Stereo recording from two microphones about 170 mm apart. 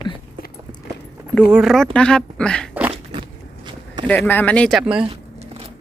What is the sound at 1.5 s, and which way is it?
A woman's voice, 5° right (ahead or behind).